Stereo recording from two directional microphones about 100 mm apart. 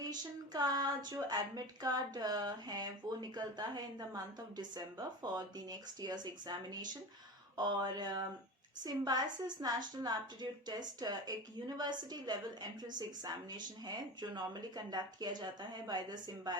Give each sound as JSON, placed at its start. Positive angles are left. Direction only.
{"t": 0.0, "sound": "a woman's voice", "side_deg": -40}